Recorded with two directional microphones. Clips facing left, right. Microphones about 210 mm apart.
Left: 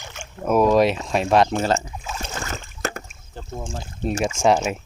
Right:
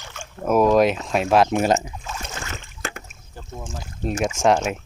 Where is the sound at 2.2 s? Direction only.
35° left (ahead or behind).